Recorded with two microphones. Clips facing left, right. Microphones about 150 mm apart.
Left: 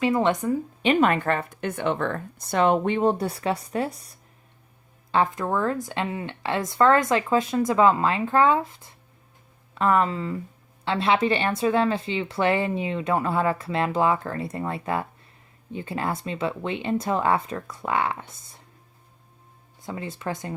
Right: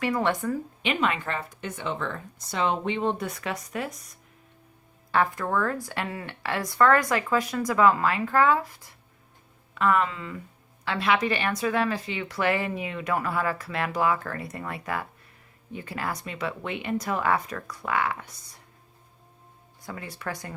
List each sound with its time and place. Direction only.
0.0 s speech: 20° left (ahead or behind)
0.8 s speech: 40° left (ahead or behind)
5.1 s speech: 20° left (ahead or behind)
9.7 s speech: 35° left (ahead or behind)
19.8 s speech: 25° left (ahead or behind)